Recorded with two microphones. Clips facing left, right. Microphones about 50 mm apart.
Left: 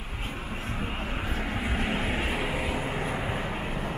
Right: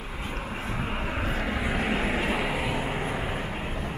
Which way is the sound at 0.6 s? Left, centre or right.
Right.